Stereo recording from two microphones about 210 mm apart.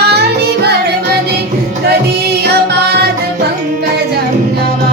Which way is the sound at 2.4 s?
50° right (ahead or behind).